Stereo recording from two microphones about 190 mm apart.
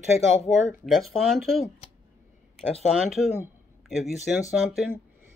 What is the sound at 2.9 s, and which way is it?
Speech, centre (ahead or behind).